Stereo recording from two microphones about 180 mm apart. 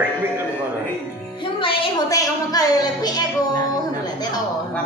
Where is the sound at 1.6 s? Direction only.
25° left (ahead or behind).